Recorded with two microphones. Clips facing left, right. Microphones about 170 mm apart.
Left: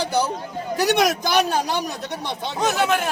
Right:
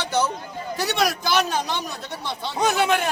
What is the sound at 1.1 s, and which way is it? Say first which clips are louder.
Speech: left 3 dB; 45° left (ahead or behind).